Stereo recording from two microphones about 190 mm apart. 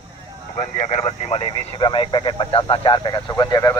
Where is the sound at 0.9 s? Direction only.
35° left (ahead or behind).